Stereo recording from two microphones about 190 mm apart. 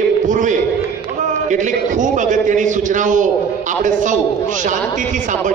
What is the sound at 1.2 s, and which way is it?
A man's voice, 40° right (ahead or behind).